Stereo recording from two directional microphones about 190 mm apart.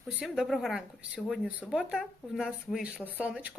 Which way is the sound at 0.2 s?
Centre (ahead or behind).